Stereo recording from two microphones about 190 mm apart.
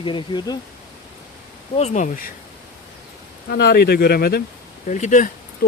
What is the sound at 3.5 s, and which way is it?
Speech, 55° left (ahead or behind).